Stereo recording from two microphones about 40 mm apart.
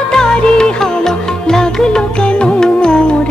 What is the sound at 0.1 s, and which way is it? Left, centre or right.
Music, centre.